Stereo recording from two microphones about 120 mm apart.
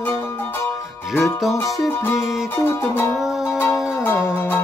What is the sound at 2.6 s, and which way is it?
Music, 20° left (ahead or behind).